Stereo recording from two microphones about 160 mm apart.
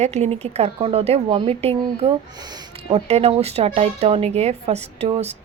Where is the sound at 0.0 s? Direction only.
45° right (ahead or behind).